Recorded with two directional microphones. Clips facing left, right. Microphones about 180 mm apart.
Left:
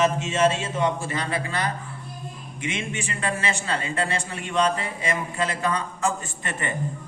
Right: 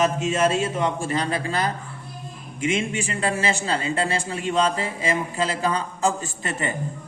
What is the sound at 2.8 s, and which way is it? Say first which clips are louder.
A man's voice: right 4 dB; 35° right (ahead or behind).